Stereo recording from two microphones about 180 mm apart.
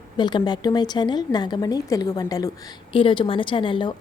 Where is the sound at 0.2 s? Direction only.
25° left (ahead or behind).